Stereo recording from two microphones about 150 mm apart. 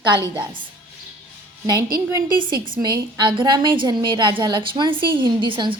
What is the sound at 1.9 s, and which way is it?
A woman's voice, 30° right (ahead or behind).